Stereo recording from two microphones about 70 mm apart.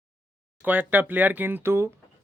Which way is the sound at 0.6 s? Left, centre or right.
Right.